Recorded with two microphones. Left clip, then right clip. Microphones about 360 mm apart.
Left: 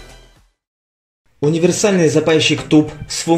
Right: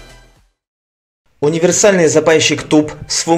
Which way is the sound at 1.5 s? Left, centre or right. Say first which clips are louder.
Right 4 dB; right.